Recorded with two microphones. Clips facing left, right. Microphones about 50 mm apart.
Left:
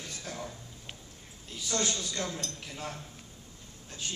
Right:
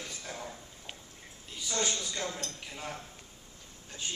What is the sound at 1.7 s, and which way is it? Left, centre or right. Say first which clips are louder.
Speech: left 1 dB; centre.